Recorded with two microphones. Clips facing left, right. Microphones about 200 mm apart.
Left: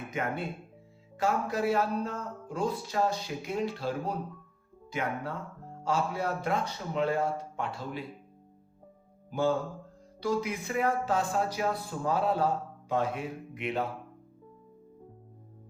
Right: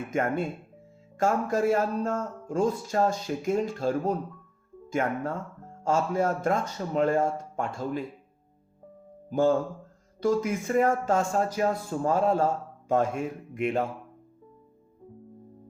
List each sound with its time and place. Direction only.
0.1 s speech: 45° right (ahead or behind)
9.3 s speech: 45° right (ahead or behind)